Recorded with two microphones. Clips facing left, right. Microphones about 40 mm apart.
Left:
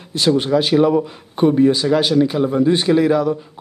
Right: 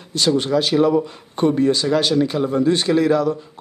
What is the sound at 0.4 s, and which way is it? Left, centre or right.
Speech, centre.